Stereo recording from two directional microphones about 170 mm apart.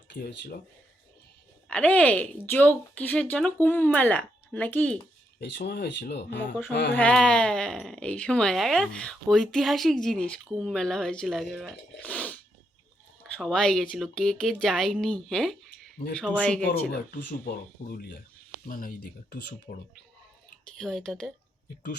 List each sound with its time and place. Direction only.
0.2 s speech: 55° left (ahead or behind)
1.6 s speech: 10° left (ahead or behind)
5.4 s speech: 80° left
6.9 s speech: 5° left (ahead or behind)
16.9 s speech: 70° left (ahead or behind); by 19.8 s 55° left (ahead or behind)
20.7 s speech: centre (ahead or behind)